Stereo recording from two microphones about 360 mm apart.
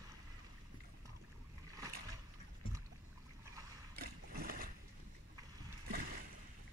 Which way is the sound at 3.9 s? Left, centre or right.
Right.